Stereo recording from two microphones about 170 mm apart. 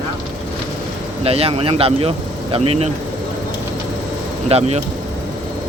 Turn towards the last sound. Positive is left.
turn(degrees=-35)  # may be behind; listen again after turning